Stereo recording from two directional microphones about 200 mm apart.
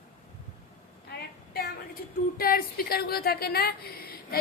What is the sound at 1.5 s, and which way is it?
A woman's voice, 50° left (ahead or behind).